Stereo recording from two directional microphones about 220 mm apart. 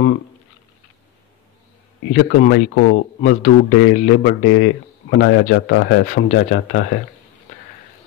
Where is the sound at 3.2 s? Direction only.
30° left (ahead or behind).